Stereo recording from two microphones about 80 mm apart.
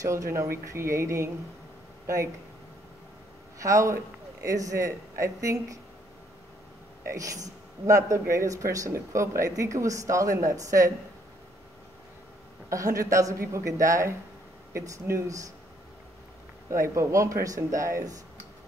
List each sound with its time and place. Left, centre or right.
0.0 s speech: right
3.5 s speech: right
7.1 s speech: right
12.6 s speech: right
16.7 s speech: right